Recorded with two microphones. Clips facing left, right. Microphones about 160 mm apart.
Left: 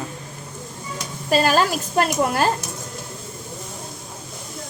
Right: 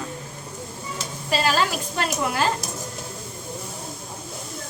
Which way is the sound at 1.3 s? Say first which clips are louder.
Left 4 dB; 45° left (ahead or behind).